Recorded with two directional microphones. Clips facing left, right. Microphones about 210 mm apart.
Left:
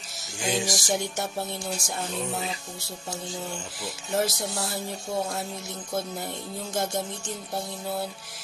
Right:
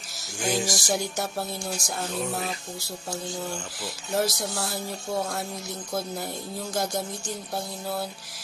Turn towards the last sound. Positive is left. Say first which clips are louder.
# even
turn(degrees=0)  # may be behind; listen again after turning